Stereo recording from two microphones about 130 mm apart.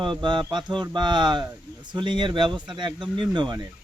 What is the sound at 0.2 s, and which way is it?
Speech, 35° right (ahead or behind).